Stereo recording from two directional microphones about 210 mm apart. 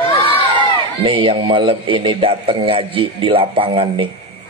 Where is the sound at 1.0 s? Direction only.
25° right (ahead or behind).